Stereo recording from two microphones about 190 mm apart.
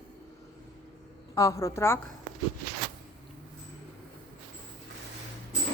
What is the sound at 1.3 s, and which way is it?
Speech, 15° left (ahead or behind).